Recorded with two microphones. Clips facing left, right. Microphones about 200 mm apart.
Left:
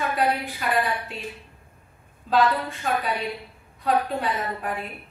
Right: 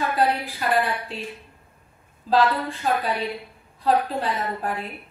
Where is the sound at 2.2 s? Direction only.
30° right (ahead or behind).